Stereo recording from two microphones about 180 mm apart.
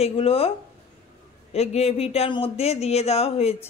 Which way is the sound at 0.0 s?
35° left (ahead or behind).